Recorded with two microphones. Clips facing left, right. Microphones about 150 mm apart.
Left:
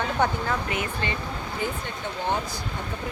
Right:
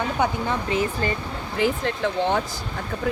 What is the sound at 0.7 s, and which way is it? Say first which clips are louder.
Speech: right 6 dB; 35° right (ahead or behind).